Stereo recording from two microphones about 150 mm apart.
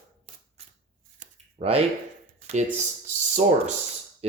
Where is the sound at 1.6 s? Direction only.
40° right (ahead or behind).